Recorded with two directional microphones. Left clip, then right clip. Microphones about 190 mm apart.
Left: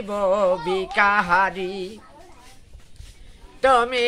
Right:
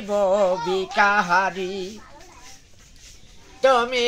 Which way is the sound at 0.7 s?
15° left (ahead or behind).